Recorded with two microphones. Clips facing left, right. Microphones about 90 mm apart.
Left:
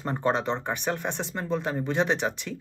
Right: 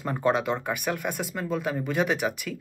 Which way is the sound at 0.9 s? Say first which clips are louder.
Left 1 dB; 30° left (ahead or behind).